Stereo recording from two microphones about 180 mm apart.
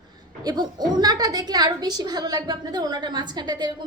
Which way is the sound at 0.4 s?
20° right (ahead or behind).